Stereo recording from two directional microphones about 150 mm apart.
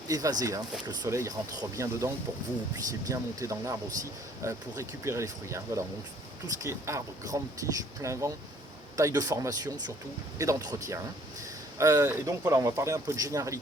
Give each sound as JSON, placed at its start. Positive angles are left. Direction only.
{"t": 0.1, "sound": "speech", "side_deg": -25}